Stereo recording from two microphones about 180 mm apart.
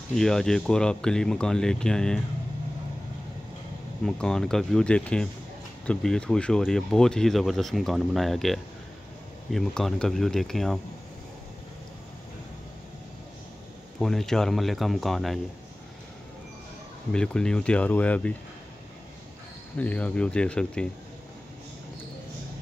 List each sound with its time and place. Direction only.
0.1 s speech: 5° left (ahead or behind)
4.0 s speech: 5° left (ahead or behind)
13.9 s speech: centre (ahead or behind)
17.1 s speech: 5° left (ahead or behind)
19.8 s speech: 10° left (ahead or behind)